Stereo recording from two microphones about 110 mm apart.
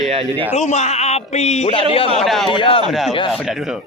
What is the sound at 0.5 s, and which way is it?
Speech, 90° left.